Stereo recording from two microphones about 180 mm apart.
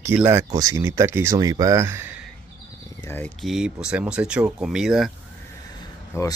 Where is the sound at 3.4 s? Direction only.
5° right (ahead or behind).